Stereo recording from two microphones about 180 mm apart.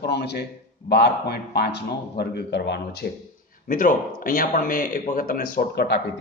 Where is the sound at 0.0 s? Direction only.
65° left (ahead or behind).